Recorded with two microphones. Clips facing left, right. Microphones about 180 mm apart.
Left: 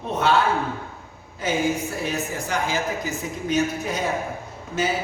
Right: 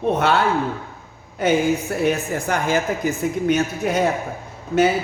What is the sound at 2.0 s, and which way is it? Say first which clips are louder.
A woman's voice: right 7 dB; 55° right (ahead or behind).